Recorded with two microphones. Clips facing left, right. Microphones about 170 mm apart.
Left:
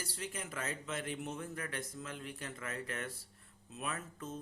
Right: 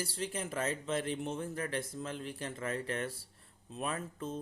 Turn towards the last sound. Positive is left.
turn(degrees=-30)  # may be behind; listen again after turning